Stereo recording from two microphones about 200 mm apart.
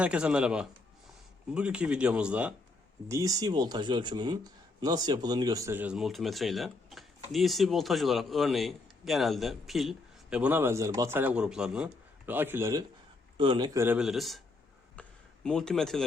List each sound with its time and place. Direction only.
0.0 s speech: 5° right (ahead or behind); by 13.8 s 20° right (ahead or behind)
13.8 s speech: 5° right (ahead or behind)
15.0 s a sound: 5° left (ahead or behind)
15.4 s speech: 5° left (ahead or behind)